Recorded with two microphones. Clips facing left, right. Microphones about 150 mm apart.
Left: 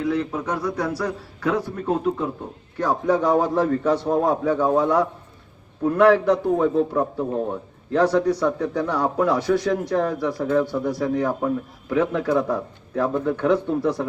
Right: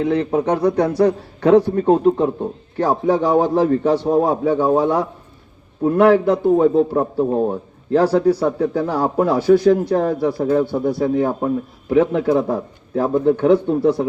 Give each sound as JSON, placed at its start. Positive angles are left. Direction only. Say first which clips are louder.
{"t": 0.0, "sound": "a man's voice", "louder": "right 5 dB", "side_deg": -60}
{"t": 0.6, "sound": "a man's voice", "louder": "right 10 dB", "side_deg": -30}